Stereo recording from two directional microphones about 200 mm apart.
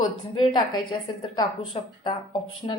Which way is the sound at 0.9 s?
25° left (ahead or behind).